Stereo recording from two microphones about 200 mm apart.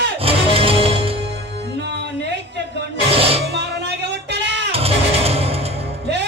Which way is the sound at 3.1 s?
30° right (ahead or behind).